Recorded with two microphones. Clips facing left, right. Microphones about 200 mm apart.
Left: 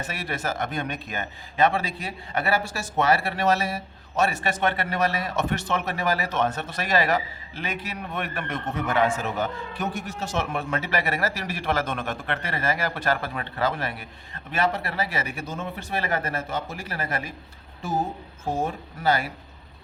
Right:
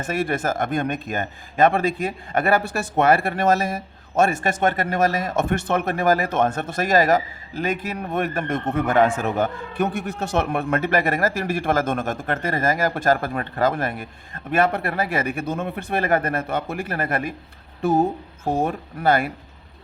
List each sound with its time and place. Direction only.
0.0 s speech: 50° right (ahead or behind)